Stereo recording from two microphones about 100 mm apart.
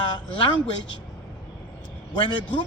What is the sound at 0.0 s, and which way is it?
Speech, 55° left (ahead or behind).